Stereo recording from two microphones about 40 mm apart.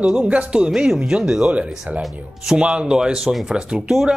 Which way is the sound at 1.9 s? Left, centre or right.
Right.